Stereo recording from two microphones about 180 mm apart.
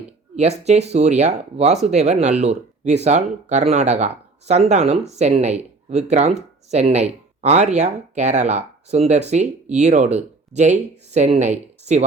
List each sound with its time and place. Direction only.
0.3 s speech: 35° right (ahead or behind)